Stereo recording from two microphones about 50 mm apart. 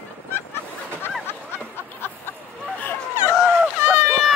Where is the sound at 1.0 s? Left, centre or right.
Left.